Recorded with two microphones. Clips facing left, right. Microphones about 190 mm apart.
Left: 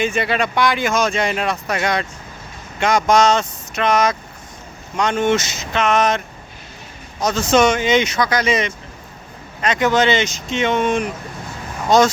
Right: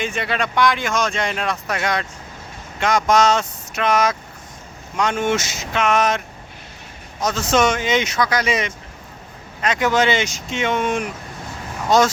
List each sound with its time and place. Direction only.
0.0 s speech: centre (ahead or behind)